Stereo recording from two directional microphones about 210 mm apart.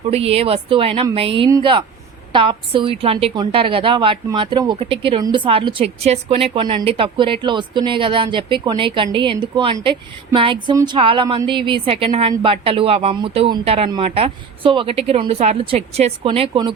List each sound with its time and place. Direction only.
0.1 s a woman's voice: 30° right (ahead or behind)